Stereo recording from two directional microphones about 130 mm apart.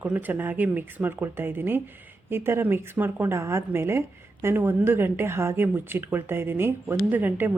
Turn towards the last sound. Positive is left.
turn(degrees=-15)  # may be behind; listen again after turning